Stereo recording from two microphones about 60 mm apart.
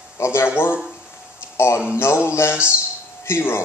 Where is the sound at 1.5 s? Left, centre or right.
Left.